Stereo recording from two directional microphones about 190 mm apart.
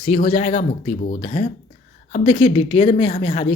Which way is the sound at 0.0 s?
40° left (ahead or behind).